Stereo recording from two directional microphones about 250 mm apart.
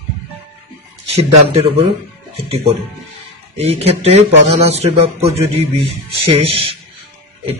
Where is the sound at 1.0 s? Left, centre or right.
Right.